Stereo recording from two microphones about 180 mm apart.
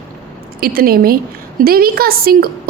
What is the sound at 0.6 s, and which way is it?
A woman's voice, 55° right (ahead or behind).